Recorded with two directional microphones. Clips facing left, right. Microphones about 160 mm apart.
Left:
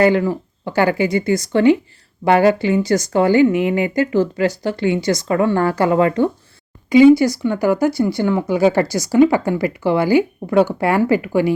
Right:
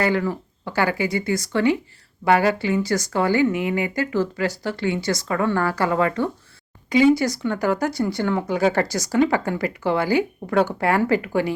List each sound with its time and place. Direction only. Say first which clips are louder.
0.0 s speech: left 7 dB; 20° left (ahead or behind)